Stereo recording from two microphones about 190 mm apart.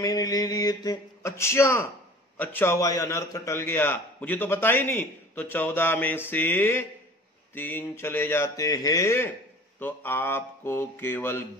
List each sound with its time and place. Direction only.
0.0 s a man's voice: 20° left (ahead or behind)